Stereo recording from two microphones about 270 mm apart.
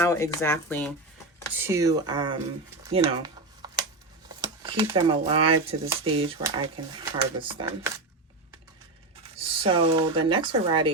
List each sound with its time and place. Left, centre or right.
0.0 s speech: centre
1.5 s speech: centre
9.4 s speech: centre